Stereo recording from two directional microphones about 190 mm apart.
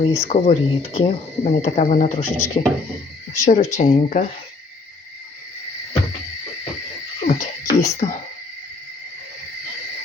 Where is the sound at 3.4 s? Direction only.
35° left (ahead or behind).